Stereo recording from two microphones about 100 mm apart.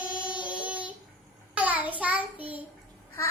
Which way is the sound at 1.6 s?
15° right (ahead or behind).